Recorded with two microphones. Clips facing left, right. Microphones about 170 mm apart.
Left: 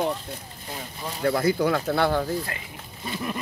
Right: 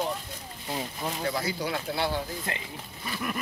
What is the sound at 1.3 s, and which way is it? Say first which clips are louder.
Speech: left 11 dB; 55° left (ahead or behind).